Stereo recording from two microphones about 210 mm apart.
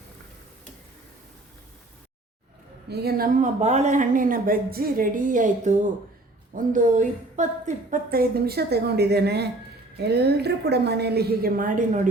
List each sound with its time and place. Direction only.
2.9 s a woman's voice: 50° right (ahead or behind)